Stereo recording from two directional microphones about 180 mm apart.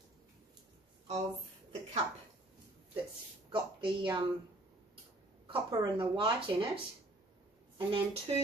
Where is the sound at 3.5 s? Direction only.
30° right (ahead or behind).